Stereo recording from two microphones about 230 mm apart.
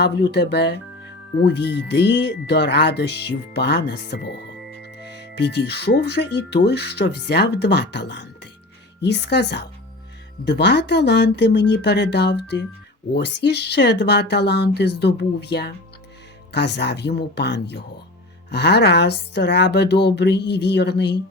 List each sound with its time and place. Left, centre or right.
0.0 s speech: left